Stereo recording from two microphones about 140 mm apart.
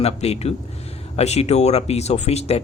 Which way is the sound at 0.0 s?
50° left (ahead or behind).